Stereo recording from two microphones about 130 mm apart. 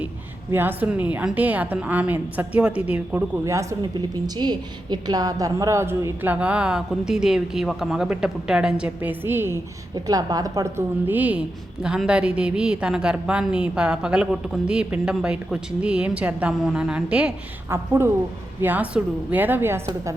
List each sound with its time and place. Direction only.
0.5 s a woman's voice: 15° right (ahead or behind)
3.4 s a woman's voice: 25° right (ahead or behind)
4.4 s a woman's voice: 35° right (ahead or behind); by 9.6 s 15° right (ahead or behind)
9.9 s a woman's voice: 30° right (ahead or behind); by 17.3 s 10° right (ahead or behind)
17.7 s a woman's voice: 20° right (ahead or behind)